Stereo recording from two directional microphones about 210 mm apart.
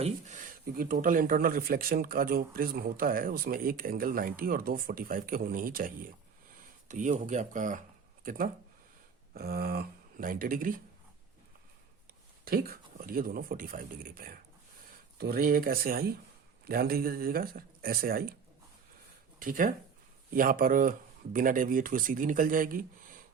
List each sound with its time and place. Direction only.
0.0 s speech: 35° right (ahead or behind)
12.5 s speech: 45° right (ahead or behind)
19.4 s speech: 40° right (ahead or behind)